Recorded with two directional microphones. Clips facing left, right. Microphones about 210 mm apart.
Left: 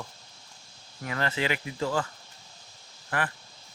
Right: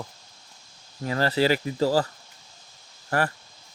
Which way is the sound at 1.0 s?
35° right (ahead or behind).